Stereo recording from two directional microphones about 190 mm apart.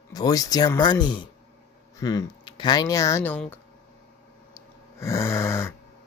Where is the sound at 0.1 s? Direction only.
20° left (ahead or behind).